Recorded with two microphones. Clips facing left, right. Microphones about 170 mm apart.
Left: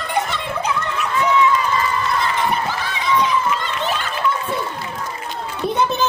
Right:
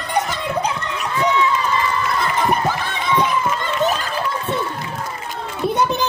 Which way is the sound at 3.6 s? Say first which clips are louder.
Right 4 dB; 40° right (ahead or behind).